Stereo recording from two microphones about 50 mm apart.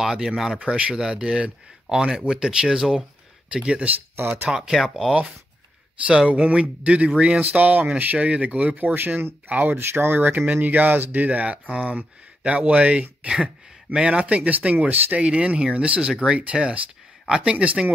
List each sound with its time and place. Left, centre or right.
0.0 s speech: centre
0.6 s speech: right
1.1 s speech: centre
3.5 s speech: right
4.2 s speech: right
4.5 s speech: centre
6.0 s speech: centre
8.9 s speech: right
9.5 s speech: right
9.8 s speech: right
10.3 s speech: right